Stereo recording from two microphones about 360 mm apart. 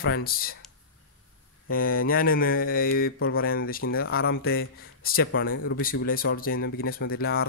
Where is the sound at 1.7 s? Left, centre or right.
Left.